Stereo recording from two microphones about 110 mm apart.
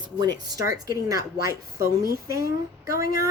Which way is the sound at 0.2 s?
35° right (ahead or behind).